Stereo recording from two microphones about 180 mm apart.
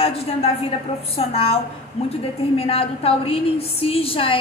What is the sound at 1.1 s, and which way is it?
A woman's voice, 30° left (ahead or behind).